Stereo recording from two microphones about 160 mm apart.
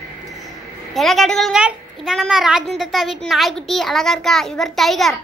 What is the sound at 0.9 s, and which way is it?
A woman's voice, centre (ahead or behind).